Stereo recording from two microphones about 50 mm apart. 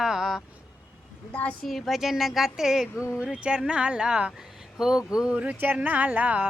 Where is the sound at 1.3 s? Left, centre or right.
Left.